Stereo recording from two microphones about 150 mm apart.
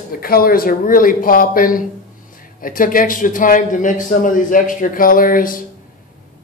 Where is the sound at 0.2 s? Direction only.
75° left (ahead or behind).